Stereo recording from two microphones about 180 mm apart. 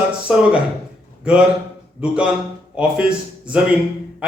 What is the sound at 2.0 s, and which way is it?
A man's voice, 5° right (ahead or behind).